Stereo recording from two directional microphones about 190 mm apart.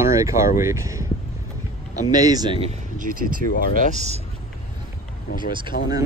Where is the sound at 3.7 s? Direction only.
35° right (ahead or behind).